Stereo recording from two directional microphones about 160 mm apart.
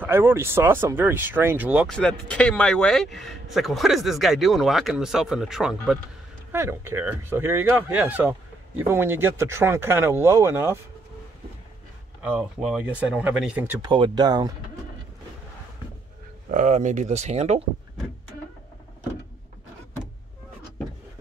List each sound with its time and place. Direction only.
0.0 s speech: 15° right (ahead or behind)
1.9 s speech: 5° left (ahead or behind)
6.5 s speech: 15° right (ahead or behind)
12.2 s speech: 5° right (ahead or behind)
13.7 s speech: 30° right (ahead or behind)
16.4 s speech: 50° right (ahead or behind)